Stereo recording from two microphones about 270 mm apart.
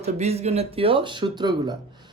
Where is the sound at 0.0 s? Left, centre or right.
Right.